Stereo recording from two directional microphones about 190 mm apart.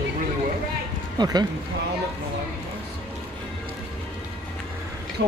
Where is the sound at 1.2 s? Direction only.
20° right (ahead or behind).